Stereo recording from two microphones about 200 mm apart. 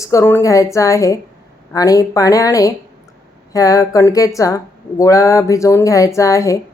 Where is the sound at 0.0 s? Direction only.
15° left (ahead or behind).